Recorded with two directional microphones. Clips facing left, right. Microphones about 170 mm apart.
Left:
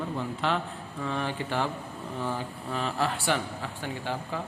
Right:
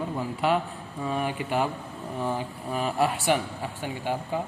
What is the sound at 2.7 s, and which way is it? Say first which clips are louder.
A man's voice: right 4 dB; 10° right (ahead or behind).